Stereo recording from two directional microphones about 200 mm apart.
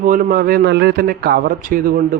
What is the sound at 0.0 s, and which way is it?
Speech, 40° right (ahead or behind).